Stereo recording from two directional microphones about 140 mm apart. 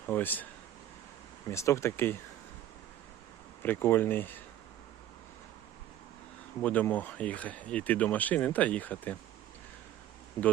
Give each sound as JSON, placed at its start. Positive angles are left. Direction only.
{"t": 0.1, "sound": "speech", "side_deg": 15}
{"t": 1.5, "sound": "speech", "side_deg": 20}
{"t": 3.6, "sound": "speech", "side_deg": 15}
{"t": 6.6, "sound": "speech", "side_deg": 10}